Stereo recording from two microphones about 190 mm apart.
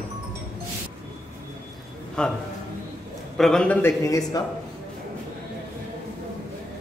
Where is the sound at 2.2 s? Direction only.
5° left (ahead or behind).